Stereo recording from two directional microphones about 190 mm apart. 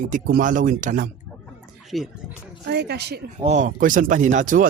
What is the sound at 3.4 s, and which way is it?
Speech, 35° right (ahead or behind).